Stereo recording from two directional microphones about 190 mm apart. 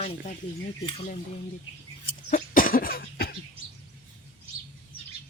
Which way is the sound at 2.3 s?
45° left (ahead or behind).